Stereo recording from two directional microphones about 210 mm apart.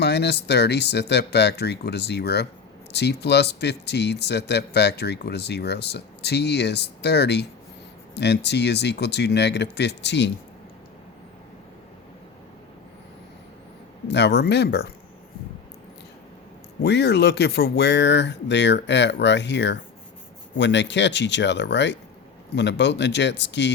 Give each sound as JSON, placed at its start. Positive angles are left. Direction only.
{"t": 0.0, "sound": "a man's voice", "side_deg": 55}
{"t": 14.1, "sound": "a man's voice", "side_deg": 55}
{"t": 16.8, "sound": "speech", "side_deg": 50}